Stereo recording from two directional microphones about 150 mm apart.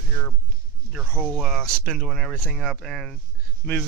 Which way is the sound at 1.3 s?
Centre (ahead or behind).